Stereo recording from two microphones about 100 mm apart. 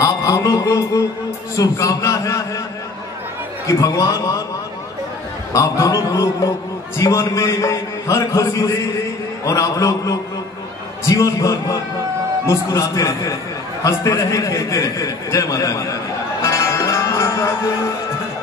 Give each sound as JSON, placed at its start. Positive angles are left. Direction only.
{"t": 0.0, "sound": "a sound", "side_deg": 35}
{"t": 1.6, "sound": "a man's voice", "side_deg": 35}
{"t": 3.6, "sound": "a man's voice", "side_deg": 35}
{"t": 5.5, "sound": "a man's voice", "side_deg": 35}
{"t": 16.4, "sound": "music", "side_deg": 30}